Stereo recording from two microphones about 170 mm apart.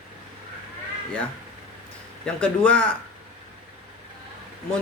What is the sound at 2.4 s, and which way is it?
Speech, 5° left (ahead or behind).